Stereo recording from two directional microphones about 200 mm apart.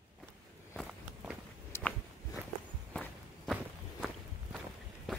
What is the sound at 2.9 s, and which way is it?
Walk, 5° left (ahead or behind).